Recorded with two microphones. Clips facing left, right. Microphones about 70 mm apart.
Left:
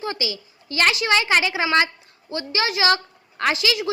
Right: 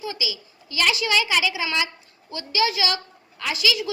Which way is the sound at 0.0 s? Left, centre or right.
Left.